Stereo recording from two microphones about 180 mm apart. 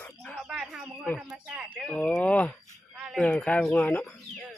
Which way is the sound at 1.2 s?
5° right (ahead or behind).